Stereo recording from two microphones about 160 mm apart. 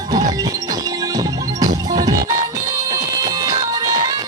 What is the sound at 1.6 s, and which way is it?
Music, 25° right (ahead or behind).